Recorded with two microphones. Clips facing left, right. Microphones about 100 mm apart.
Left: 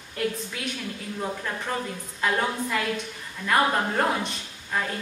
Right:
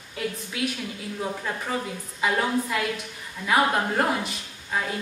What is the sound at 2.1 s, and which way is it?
A woman's voice, 5° right (ahead or behind).